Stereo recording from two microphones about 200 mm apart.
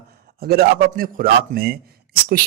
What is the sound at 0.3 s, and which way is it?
A man's voice, 50° right (ahead or behind).